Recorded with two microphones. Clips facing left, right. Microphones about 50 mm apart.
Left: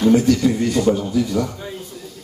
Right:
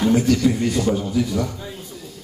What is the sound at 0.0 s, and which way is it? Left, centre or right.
A man's voice, centre.